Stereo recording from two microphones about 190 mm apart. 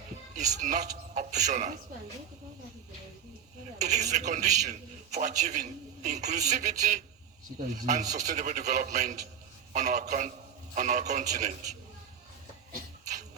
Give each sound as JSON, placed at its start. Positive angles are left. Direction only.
{"t": 0.3, "sound": "speech", "side_deg": -40}
{"t": 3.8, "sound": "a man's voice", "side_deg": -40}